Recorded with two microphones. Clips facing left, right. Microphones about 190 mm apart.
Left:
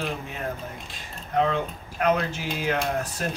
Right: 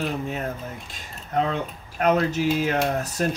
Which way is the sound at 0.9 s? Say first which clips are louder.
Even; 40° right (ahead or behind).